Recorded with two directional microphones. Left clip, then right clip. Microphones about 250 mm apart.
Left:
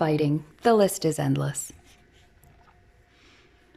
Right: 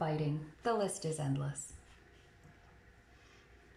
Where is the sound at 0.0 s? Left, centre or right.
Left.